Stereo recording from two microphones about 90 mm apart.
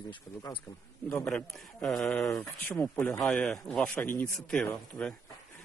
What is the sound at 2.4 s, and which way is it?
Speech, 30° left (ahead or behind).